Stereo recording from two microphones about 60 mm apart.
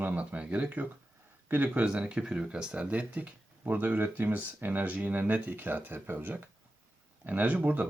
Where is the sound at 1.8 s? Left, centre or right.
Centre.